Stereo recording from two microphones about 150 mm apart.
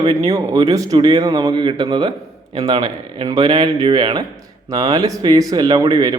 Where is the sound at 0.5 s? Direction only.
25° right (ahead or behind).